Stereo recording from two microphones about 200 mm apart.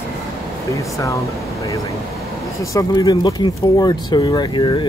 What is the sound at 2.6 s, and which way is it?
Speech, 15° left (ahead or behind).